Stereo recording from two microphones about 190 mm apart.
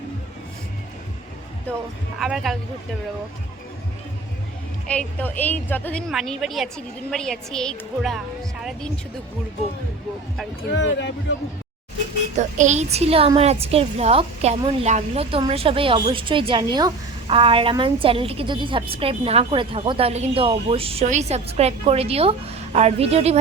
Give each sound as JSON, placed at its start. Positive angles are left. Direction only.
{"t": 2.1, "sound": "a woman's voice", "side_deg": 0}
{"t": 4.9, "sound": "a woman's voice", "side_deg": 10}
{"t": 10.8, "sound": "speech", "side_deg": 70}
{"t": 12.4, "sound": "a woman's voice", "side_deg": -40}